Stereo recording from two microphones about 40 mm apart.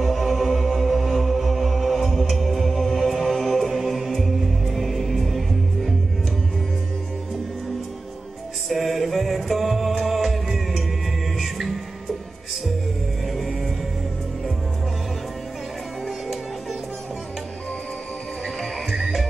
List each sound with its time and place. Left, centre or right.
0.0 s music: centre
8.6 s music: centre
13.3 s music: centre
18.6 s music: centre